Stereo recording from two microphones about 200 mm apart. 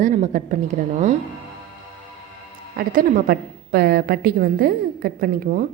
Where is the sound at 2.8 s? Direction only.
45° right (ahead or behind).